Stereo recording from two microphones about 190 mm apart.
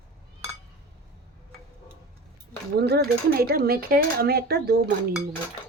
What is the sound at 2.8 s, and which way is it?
A woman's voice, 60° right (ahead or behind).